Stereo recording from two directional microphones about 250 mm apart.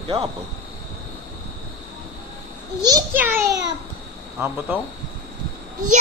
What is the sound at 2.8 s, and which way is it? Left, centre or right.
Speech, centre.